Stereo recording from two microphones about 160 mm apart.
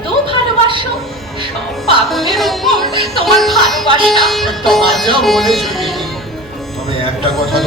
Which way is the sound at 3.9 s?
30° right (ahead or behind).